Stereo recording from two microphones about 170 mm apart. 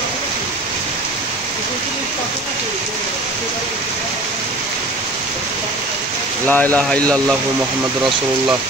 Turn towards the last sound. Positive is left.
turn(degrees=5)  # may be behind; listen again after turning